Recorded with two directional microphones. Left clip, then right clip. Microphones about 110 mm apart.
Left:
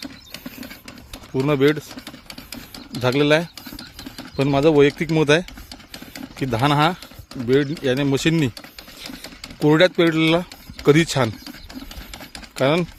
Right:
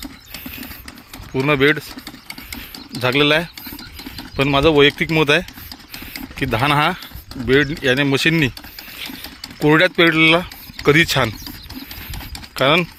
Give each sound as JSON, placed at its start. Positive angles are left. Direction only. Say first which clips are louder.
{"t": 1.5, "sound": "speech", "louder": "right 3 dB", "side_deg": 15}
{"t": 3.0, "sound": "speech", "louder": "right 2 dB", "side_deg": 20}
{"t": 4.5, "sound": "speech", "louder": "right 2 dB", "side_deg": 25}
{"t": 7.4, "sound": "speech", "louder": "right 4 dB", "side_deg": 5}
{"t": 9.6, "sound": "speech", "louder": "right 2 dB", "side_deg": 15}
{"t": 12.5, "sound": "speech", "louder": "right 4 dB", "side_deg": 15}